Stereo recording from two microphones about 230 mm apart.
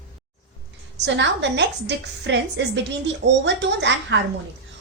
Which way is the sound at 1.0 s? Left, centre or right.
Right.